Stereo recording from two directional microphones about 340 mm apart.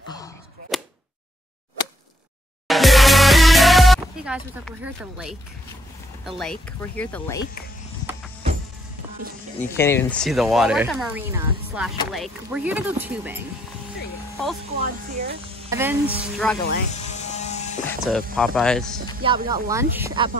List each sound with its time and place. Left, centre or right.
0.7 s a sound: centre
2.7 s music: centre
6.2 s speech: centre
9.6 s speech: centre
14.8 s speech: right
15.7 s speech: centre
16.6 s electric shaver: left
17.8 s speech: centre
19.2 s speech: centre